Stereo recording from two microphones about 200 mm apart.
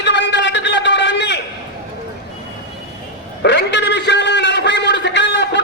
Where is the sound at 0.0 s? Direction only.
60° left (ahead or behind).